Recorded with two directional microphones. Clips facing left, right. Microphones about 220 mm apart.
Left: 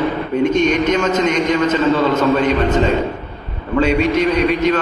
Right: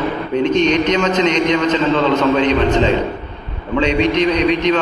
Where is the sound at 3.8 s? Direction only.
5° left (ahead or behind).